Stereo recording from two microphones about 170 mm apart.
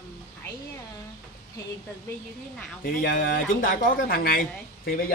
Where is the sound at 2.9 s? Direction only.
55° left (ahead or behind).